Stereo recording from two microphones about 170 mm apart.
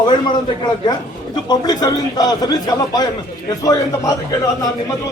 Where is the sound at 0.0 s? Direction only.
25° left (ahead or behind).